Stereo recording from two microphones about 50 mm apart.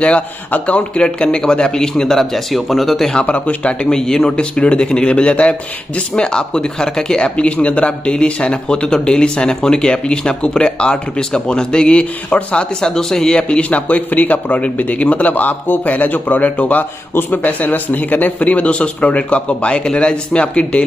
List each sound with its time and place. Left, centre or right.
0.0 s a man's voice: left; by 3.2 s centre
3.2 s a man's voice: left
3.9 s a man's voice: centre
13.4 s a man's voice: left
17.1 s a man's voice: left